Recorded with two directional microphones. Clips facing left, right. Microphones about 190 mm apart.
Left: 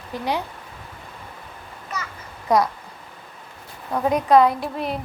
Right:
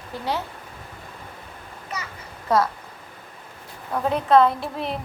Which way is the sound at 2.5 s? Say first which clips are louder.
Left 2 dB; 15° left (ahead or behind).